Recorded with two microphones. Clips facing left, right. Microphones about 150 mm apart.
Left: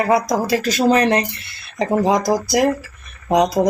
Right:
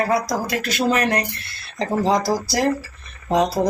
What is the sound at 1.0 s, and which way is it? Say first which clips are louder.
Speech: left 4 dB; 25° left (ahead or behind).